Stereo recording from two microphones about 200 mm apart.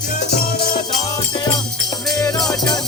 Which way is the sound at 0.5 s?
25° left (ahead or behind).